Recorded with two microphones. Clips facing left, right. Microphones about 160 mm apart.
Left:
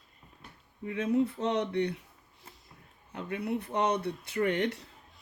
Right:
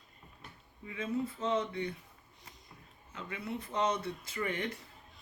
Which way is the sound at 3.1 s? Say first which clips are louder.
Left 7 dB; 60° left (ahead or behind).